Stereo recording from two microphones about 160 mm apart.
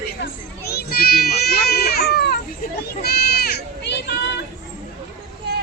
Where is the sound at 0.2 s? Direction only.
80° left.